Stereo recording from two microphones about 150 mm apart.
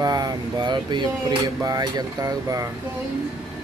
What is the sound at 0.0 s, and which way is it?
Speech, 25° right (ahead or behind).